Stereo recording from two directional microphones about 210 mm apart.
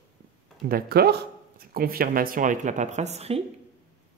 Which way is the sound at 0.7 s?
45° right (ahead or behind).